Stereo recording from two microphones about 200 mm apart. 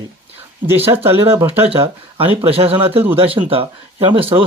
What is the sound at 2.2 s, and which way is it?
Speech, 30° right (ahead or behind).